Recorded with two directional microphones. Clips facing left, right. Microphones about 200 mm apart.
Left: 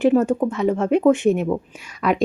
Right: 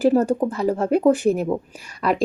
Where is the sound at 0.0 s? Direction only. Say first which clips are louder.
Left 1 dB; 35° right (ahead or behind).